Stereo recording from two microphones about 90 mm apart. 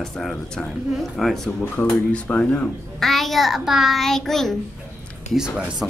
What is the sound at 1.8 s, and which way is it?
Speech, 15° left (ahead or behind).